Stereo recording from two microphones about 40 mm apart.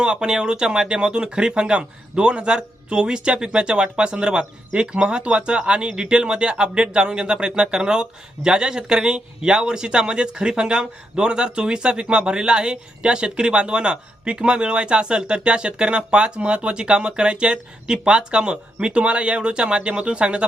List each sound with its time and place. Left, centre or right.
0.0 s speech: right